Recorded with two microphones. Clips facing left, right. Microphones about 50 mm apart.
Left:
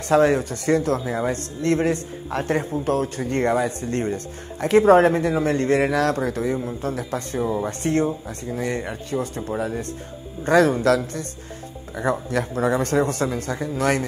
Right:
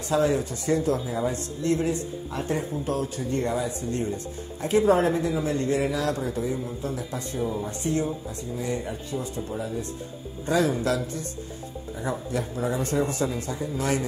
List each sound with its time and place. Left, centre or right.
0.1 s speech: left